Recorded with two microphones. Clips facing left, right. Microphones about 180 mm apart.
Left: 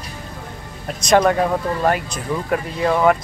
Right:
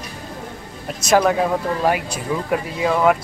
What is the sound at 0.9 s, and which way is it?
Speech, 5° right (ahead or behind).